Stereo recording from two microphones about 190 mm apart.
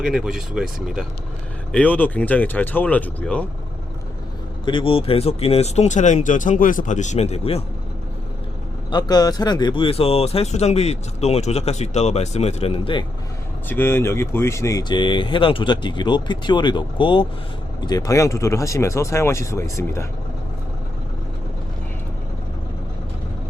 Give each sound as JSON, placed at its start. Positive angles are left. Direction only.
{"t": 0.0, "sound": "speech", "side_deg": 0}
{"t": 4.6, "sound": "speech", "side_deg": 25}
{"t": 8.9, "sound": "speech", "side_deg": 20}
{"t": 13.7, "sound": "speech", "side_deg": 10}